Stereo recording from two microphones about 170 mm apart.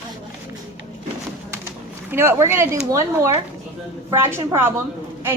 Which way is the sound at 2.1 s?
15° right (ahead or behind).